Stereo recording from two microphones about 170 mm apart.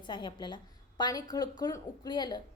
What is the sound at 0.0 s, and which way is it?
A woman's voice, 25° left (ahead or behind).